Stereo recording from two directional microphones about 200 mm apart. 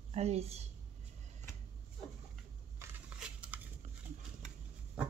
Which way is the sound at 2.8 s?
10° right (ahead or behind).